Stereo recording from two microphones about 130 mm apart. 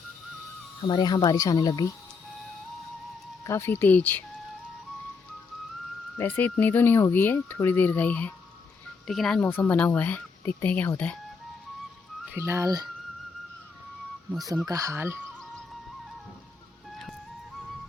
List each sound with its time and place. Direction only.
0.8 s speech: 35° left (ahead or behind)
3.4 s speech: 20° left (ahead or behind)
6.1 s speech: 15° left (ahead or behind)
9.0 s speech: 5° left (ahead or behind)
12.3 s speech: 20° right (ahead or behind)
14.7 s speech: 25° right (ahead or behind)